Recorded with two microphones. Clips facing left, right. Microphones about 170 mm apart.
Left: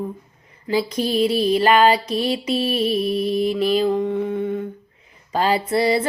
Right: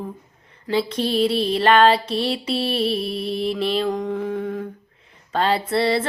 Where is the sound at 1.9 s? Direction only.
30° right (ahead or behind).